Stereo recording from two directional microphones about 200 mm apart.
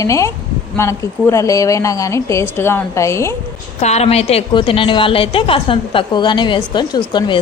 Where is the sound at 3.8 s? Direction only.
35° left (ahead or behind).